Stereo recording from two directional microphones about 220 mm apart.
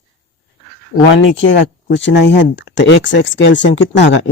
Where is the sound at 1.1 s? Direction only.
55° left (ahead or behind).